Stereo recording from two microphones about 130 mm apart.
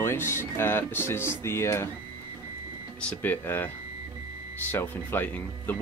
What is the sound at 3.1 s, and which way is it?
Speech, 15° left (ahead or behind).